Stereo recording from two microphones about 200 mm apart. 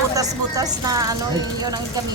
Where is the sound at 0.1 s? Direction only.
15° right (ahead or behind).